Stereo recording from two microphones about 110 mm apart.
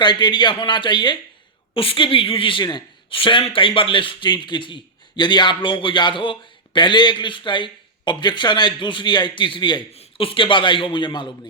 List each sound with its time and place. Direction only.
0.0 s a man's voice: 45° left (ahead or behind)
9.9 s a man's voice: 60° left (ahead or behind); by 11.3 s 45° left (ahead or behind)